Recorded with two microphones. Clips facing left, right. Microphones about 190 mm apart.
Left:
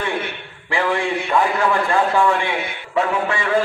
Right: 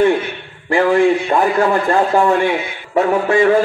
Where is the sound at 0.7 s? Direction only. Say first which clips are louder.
Right 9 dB; 45° right (ahead or behind).